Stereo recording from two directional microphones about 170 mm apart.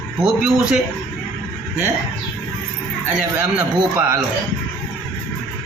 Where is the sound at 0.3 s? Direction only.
5° right (ahead or behind).